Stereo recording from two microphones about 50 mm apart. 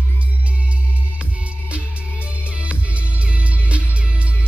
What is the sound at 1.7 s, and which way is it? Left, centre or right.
Music, right.